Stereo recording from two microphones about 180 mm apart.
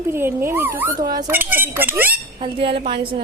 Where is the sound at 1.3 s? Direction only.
10° right (ahead or behind).